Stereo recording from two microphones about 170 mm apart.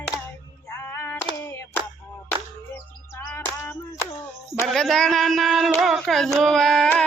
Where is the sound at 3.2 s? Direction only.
15° left (ahead or behind).